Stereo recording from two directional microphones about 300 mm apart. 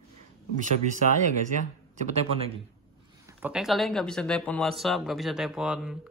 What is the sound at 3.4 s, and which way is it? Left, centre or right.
Speech, centre.